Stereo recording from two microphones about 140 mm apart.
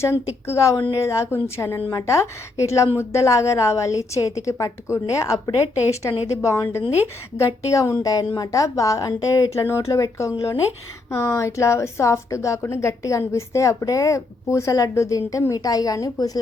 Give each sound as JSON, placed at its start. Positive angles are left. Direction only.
{"t": 0.4, "sound": "a woman's voice", "side_deg": 20}